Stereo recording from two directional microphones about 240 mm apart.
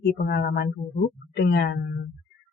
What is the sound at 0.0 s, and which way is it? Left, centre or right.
Speech, left.